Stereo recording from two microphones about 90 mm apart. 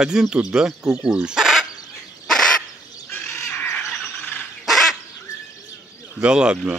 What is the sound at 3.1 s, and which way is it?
Crow, 10° left (ahead or behind).